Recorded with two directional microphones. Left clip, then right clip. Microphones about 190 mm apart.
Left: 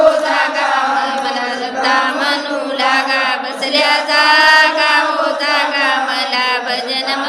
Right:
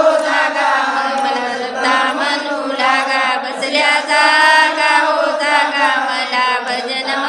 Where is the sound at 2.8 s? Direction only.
Centre (ahead or behind).